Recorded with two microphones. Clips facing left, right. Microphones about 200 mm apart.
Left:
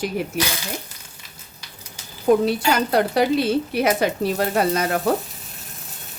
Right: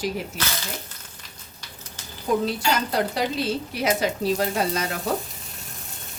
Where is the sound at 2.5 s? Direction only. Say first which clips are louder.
Left 5 dB; 60° left (ahead or behind).